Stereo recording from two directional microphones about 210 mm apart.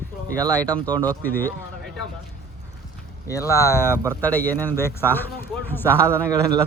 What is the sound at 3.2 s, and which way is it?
Speech, 15° left (ahead or behind).